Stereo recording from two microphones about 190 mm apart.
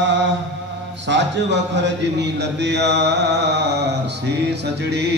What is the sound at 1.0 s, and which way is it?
A man's voice, 65° right (ahead or behind).